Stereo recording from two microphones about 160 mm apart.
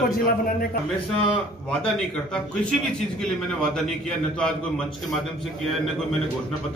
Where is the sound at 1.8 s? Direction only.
5° left (ahead or behind).